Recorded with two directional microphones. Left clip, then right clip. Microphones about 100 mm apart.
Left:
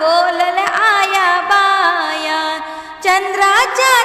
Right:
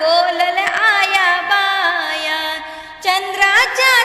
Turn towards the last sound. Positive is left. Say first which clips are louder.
# left 1 dB
turn(degrees=40)  # may be behind; listen again after turning